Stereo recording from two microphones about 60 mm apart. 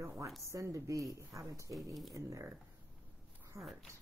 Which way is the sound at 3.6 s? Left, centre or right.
Right.